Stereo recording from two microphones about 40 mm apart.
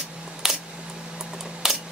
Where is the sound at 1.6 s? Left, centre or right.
Centre.